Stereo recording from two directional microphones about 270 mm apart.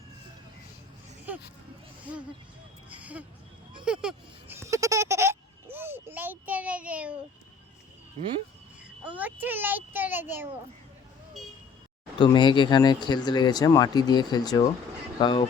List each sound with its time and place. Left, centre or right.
2.9 s a sound: centre
9.0 s a child's voice: centre
12.2 s speech: centre